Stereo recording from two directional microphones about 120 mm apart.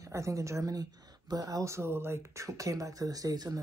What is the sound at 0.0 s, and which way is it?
Speech, 25° right (ahead or behind).